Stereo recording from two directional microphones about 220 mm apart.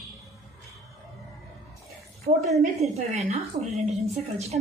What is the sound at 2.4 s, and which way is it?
Speech, centre (ahead or behind).